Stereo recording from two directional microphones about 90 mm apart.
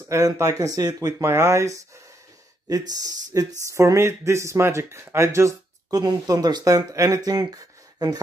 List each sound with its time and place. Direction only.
0.0 s speech: 35° right (ahead or behind)
2.7 s speech: 45° right (ahead or behind)
3.6 s speech: 35° right (ahead or behind)